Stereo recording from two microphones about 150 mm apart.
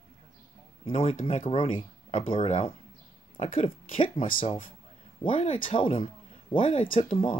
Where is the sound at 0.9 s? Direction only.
50° left (ahead or behind).